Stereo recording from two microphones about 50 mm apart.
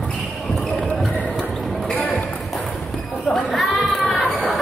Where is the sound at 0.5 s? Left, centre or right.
Centre.